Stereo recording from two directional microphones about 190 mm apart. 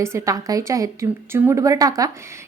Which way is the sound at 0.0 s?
15° right (ahead or behind).